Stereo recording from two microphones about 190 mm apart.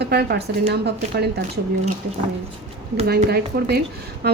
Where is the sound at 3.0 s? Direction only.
55° right (ahead or behind).